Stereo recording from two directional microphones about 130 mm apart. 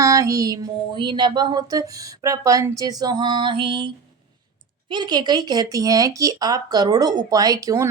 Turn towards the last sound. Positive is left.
turn(degrees=-30)  # may be behind; listen again after turning